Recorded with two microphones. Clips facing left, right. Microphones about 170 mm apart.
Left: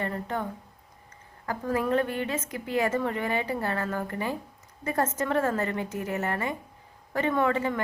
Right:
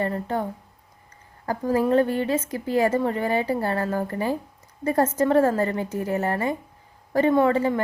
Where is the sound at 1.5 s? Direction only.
30° right (ahead or behind).